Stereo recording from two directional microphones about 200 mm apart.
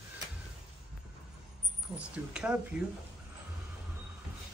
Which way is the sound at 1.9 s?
5° right (ahead or behind).